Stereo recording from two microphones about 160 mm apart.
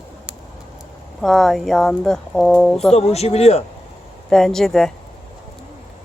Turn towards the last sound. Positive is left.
turn(degrees=5)  # may be behind; listen again after turning